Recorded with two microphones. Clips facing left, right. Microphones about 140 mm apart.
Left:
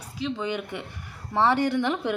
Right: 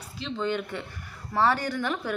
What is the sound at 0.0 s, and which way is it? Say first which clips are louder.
A woman's voice: left 1 dB; 10° left (ahead or behind).